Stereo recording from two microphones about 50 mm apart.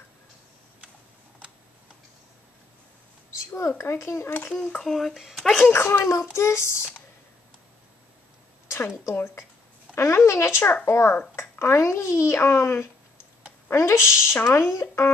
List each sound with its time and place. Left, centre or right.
3.5 s a child's voice: left
4.3 s a child's voice: left
4.8 s speech: centre
5.7 s a child's voice: left
8.6 s a child's voice: left
9.9 s a child's voice: left
13.7 s a child's voice: left